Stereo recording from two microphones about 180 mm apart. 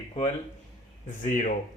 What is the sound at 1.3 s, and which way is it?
Speech, 45° left (ahead or behind).